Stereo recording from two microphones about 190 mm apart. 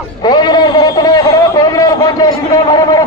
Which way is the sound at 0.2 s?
20° left (ahead or behind).